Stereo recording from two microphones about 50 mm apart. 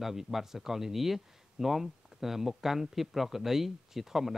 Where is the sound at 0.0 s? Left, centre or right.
Centre.